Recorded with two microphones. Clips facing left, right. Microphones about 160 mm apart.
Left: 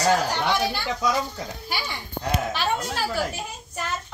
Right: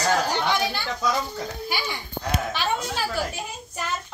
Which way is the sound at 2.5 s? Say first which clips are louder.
Even; 5° left (ahead or behind).